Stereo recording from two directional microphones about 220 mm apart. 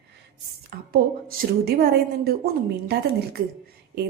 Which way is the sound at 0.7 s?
45° right (ahead or behind).